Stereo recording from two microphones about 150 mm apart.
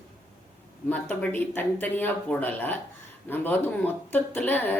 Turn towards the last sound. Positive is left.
turn(degrees=10)  # may be behind; listen again after turning